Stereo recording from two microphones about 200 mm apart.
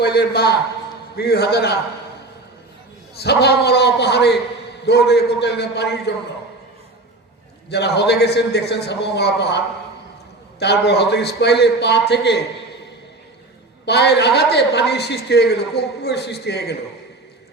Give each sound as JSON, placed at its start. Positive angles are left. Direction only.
{"t": 0.0, "sound": "a man's voice", "side_deg": 55}
{"t": 3.2, "sound": "a woman's voice", "side_deg": 55}
{"t": 7.7, "sound": "a woman's voice", "side_deg": 55}
{"t": 10.6, "sound": "a woman's voice", "side_deg": 55}
{"t": 13.8, "sound": "a woman's voice", "side_deg": 55}